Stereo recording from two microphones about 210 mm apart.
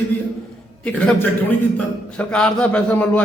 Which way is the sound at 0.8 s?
5° left (ahead or behind).